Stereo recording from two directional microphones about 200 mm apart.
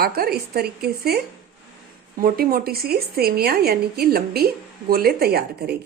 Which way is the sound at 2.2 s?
45° right (ahead or behind).